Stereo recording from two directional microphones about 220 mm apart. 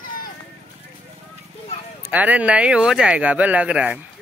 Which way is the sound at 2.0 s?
5° right (ahead or behind).